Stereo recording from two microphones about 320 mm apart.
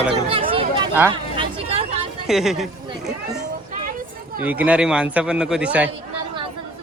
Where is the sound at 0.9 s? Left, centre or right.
Centre.